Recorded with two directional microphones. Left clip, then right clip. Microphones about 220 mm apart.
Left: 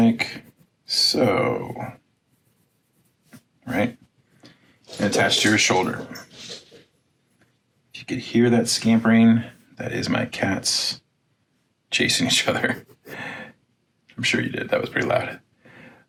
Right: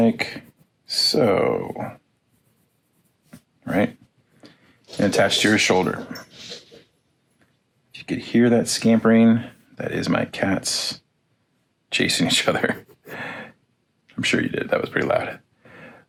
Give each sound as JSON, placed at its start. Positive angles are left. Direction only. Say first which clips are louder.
{"t": 0.0, "sound": "speech", "louder": "right 1 dB", "side_deg": -25}
{"t": 3.2, "sound": "dog", "louder": "right 3 dB", "side_deg": -25}
{"t": 5.4, "sound": "speech", "louder": "right 1 dB", "side_deg": -25}
{"t": 7.9, "sound": "speech", "louder": "right 1 dB", "side_deg": -25}